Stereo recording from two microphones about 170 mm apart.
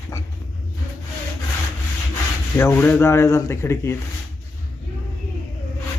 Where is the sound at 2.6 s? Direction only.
15° left (ahead or behind).